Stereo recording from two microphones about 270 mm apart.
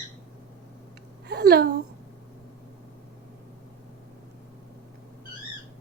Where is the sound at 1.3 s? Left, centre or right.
Right.